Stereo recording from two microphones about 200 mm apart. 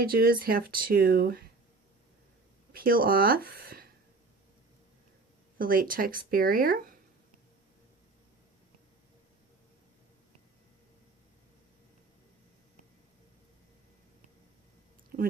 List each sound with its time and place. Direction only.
0.0 s speech: 50° right (ahead or behind)
2.7 s speech: 45° right (ahead or behind)
5.5 s speech: 45° right (ahead or behind)
15.1 s a sound: 45° right (ahead or behind)